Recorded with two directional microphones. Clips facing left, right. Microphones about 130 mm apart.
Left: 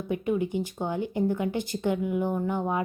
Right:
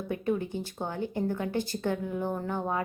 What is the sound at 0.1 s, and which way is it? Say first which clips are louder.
Speech: left 3 dB; 15° left (ahead or behind).